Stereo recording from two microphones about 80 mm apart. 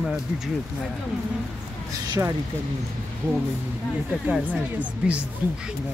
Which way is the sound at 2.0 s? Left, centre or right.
Right.